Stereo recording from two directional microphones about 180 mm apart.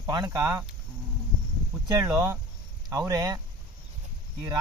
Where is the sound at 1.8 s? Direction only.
20° right (ahead or behind).